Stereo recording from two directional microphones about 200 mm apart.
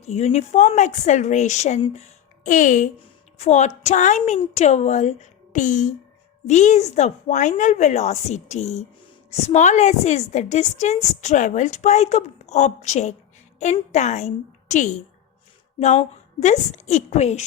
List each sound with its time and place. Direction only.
0.0 s a woman's voice: 35° left (ahead or behind)
3.0 s a sound: 35° left (ahead or behind)
3.8 s a woman's voice: 35° left (ahead or behind)